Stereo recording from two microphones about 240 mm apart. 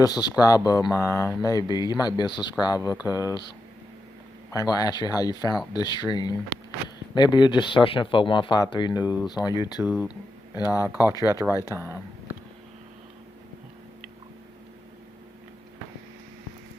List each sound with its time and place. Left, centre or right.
0.0 s speech: centre
4.5 s speech: centre
9.8 s speech: centre
10.9 s speech: centre
11.7 s speech: centre